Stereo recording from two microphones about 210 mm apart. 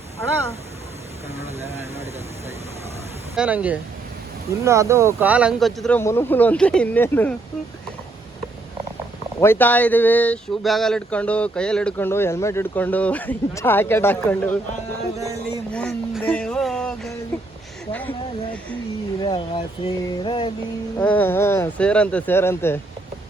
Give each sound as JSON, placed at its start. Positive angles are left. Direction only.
{"t": 3.3, "sound": "speech", "side_deg": -5}
{"t": 9.4, "sound": "speech", "side_deg": 10}
{"t": 15.2, "sound": "a sound", "side_deg": -15}
{"t": 15.7, "sound": "a sound", "side_deg": 5}
{"t": 19.2, "sound": "music", "side_deg": 20}
{"t": 21.0, "sound": "speech", "side_deg": 10}